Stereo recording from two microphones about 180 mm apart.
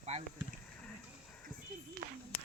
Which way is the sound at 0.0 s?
35° right (ahead or behind).